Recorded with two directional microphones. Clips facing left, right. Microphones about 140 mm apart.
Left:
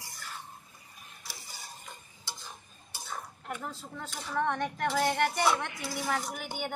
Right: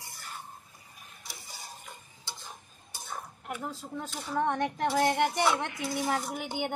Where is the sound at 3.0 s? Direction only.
15° right (ahead or behind).